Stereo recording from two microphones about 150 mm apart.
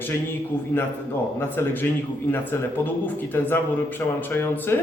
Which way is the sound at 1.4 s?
15° left (ahead or behind).